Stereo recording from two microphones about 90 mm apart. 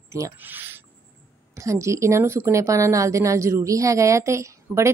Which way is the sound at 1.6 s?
35° right (ahead or behind).